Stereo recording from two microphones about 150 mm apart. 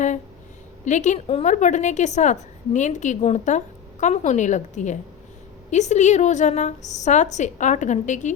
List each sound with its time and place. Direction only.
0.9 s a woman's voice: 55° left (ahead or behind)